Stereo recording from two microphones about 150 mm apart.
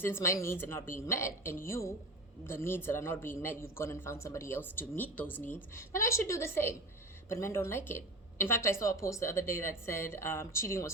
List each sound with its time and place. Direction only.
0.0 s a man's voice: 15° left (ahead or behind)